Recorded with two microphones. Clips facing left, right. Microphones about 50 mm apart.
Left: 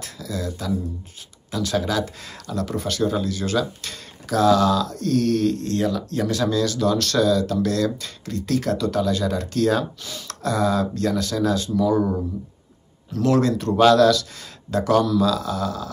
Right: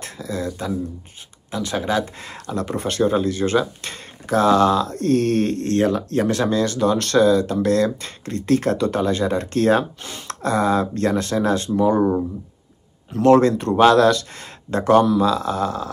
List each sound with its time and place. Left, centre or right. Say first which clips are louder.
0.0 s a sound: right 3 dB; right
1.5 s speech: right 1 dB; right
13.1 s speech: right 6 dB; right